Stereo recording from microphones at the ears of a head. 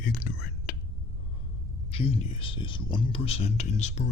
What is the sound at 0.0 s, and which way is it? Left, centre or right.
Whispering, left.